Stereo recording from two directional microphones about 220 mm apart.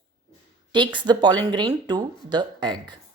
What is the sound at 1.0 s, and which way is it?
A woman's voice, 20° right (ahead or behind).